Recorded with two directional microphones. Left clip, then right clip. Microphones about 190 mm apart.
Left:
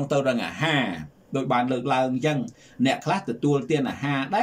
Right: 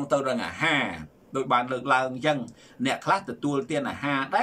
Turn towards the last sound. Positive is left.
turn(degrees=15)  # may be behind; listen again after turning